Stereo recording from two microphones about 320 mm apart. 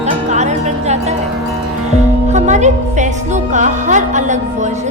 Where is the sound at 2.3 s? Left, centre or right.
Right.